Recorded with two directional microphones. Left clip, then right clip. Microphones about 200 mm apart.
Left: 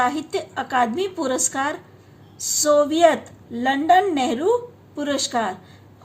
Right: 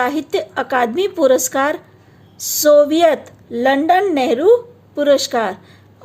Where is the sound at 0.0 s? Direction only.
45° right (ahead or behind).